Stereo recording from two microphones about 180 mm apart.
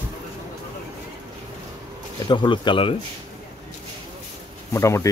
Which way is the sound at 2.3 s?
25° left (ahead or behind).